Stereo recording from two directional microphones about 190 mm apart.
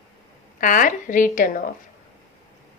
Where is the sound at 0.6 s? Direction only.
45° left (ahead or behind).